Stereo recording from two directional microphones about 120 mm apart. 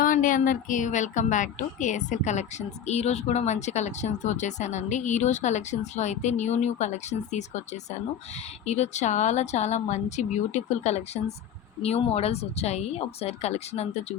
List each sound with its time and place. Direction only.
0.1 s a woman's voice: 90° left; by 7.6 s 75° left (ahead or behind)
8.6 s a woman's voice: 65° left (ahead or behind)